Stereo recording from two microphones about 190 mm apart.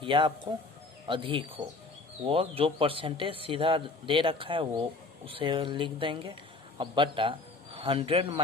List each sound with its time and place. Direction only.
0.0 s speech: 25° right (ahead or behind)